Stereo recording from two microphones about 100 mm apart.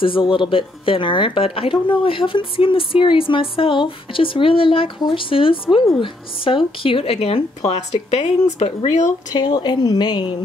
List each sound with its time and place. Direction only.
0.0 s speech: 60° left (ahead or behind); by 8.7 s 90° left
9.3 s a woman's voice: 45° left (ahead or behind)